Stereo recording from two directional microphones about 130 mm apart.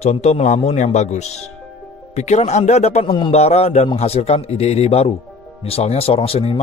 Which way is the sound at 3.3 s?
55° left (ahead or behind).